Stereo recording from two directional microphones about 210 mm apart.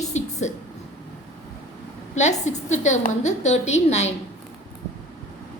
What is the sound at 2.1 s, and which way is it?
A woman's voice, 35° left (ahead or behind).